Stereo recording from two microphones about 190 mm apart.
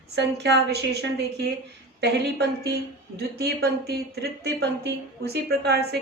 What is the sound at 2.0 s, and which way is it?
Speech, 60° right (ahead or behind).